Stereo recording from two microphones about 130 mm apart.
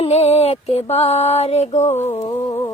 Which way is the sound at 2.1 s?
30° left (ahead or behind).